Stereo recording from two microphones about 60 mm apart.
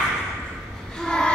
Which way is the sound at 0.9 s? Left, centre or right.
Centre.